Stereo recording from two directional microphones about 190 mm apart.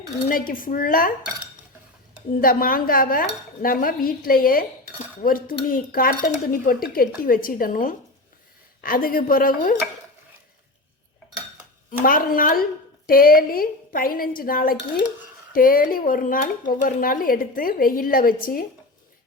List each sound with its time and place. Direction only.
0.3 s speech: 45° left (ahead or behind)
2.4 s speech: 50° left (ahead or behind)
11.9 s speech: 50° left (ahead or behind)